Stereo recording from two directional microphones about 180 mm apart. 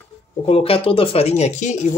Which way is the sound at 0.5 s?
30° left (ahead or behind).